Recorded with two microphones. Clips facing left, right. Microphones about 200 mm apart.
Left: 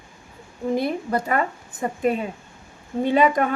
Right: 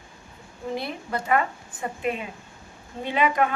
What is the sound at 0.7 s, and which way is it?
A woman's voice, 45° left (ahead or behind).